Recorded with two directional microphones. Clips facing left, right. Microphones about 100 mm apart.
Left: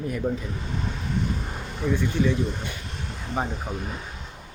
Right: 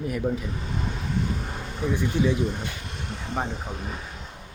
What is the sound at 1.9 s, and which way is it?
Speech, 15° right (ahead or behind).